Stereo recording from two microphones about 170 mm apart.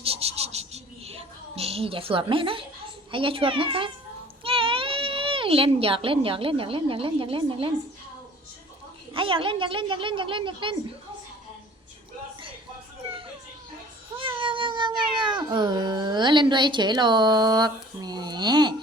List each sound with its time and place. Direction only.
0.0 s a sound: 35° right (ahead or behind)
3.1 s a woman's voice: 30° right (ahead or behind)
9.1 s a woman's voice: 30° right (ahead or behind)
14.2 s cat: 30° right (ahead or behind)